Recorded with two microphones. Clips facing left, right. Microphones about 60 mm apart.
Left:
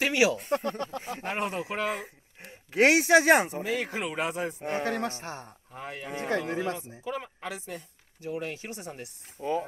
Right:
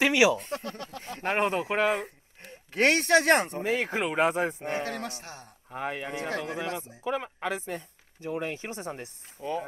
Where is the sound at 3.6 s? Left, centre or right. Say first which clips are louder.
Right 3 dB; right.